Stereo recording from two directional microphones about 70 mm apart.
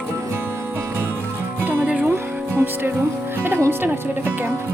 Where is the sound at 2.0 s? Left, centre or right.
Right.